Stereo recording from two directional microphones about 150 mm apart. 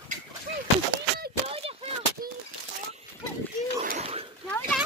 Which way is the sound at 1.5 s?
40° right (ahead or behind).